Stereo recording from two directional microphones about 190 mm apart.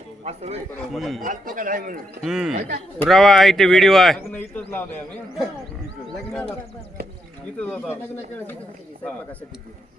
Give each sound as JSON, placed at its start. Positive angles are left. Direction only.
{"t": 0.3, "sound": "a man's voice", "side_deg": -35}
{"t": 0.9, "sound": "speech", "side_deg": 0}
{"t": 1.2, "sound": "speech", "side_deg": -45}
{"t": 2.2, "sound": "a man's voice", "side_deg": -5}
{"t": 7.6, "sound": "a man's voice", "side_deg": 5}